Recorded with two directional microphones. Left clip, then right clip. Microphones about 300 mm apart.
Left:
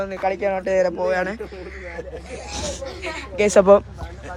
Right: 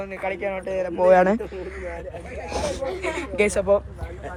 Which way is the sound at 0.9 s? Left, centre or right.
Centre.